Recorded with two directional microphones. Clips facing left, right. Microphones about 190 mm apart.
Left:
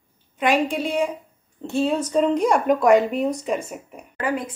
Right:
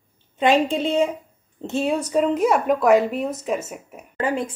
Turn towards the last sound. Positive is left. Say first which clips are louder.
# right 1 dB
turn(degrees=-25)  # may be behind; listen again after turning